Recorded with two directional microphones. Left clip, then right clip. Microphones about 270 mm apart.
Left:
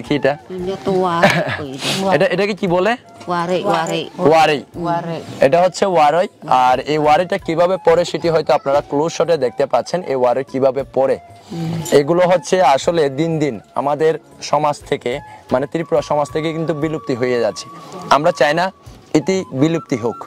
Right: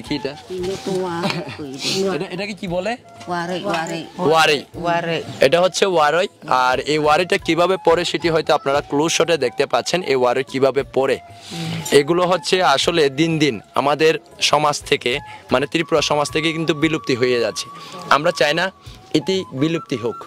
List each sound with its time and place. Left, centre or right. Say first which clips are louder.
0.1 s speech: left 8 dB; left
1.2 s speech: left 10 dB; left
2.2 s speech: left 11 dB; left
4.4 s speech: right 1 dB; centre
4.8 s speech: right 1 dB; right
5.4 s speech: left 2 dB; centre
8.5 s speech: left 3 dB; right
9.3 s speech: left 2 dB; right
10.1 s speech: left 3 dB; right
17.3 s speech: left 2 dB; centre